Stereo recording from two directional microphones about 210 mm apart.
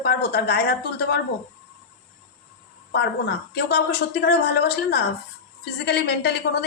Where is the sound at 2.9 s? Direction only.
50° left (ahead or behind).